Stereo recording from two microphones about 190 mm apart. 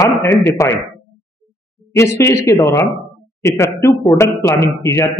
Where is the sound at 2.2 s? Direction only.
15° left (ahead or behind).